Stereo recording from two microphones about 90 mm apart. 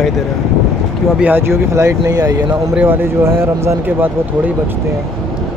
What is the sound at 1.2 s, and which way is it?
Speech, 20° right (ahead or behind).